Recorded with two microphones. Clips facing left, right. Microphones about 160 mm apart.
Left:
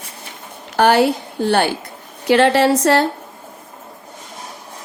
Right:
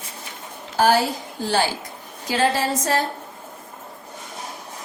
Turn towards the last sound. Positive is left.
turn(degrees=70)  # may be behind; listen again after turning